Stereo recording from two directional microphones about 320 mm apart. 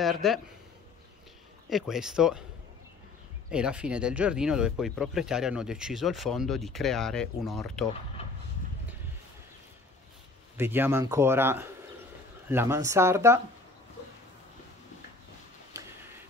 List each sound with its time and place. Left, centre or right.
0.0 s speech: centre
1.7 s speech: centre
3.4 s speech: centre
10.6 s a man's voice: centre